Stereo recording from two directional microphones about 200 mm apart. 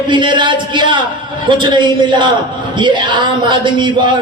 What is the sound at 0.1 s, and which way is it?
Speech, 25° right (ahead or behind).